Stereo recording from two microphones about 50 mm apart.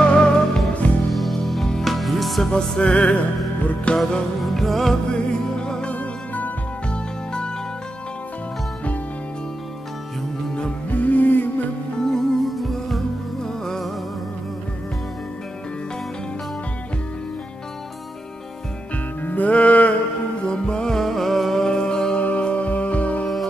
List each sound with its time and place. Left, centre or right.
0.0 s music: centre
1.1 s music: centre
2.5 s music: centre
4.4 s music: centre
5.1 s music: centre
5.9 s music: left
6.9 s music: centre
10.9 s music: left
12.0 s music: centre
19.2 s music: left
20.4 s music: centre